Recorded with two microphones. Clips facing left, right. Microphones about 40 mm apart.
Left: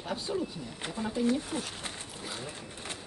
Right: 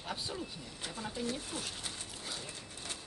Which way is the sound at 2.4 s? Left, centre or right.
Left.